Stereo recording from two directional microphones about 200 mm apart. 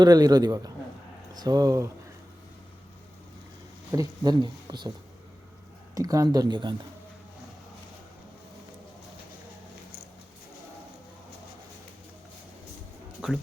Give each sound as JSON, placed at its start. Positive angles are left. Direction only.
{"t": 0.0, "sound": "speech", "side_deg": -20}
{"t": 3.9, "sound": "speech", "side_deg": -20}
{"t": 5.9, "sound": "speech", "side_deg": -15}
{"t": 13.2, "sound": "speech", "side_deg": -5}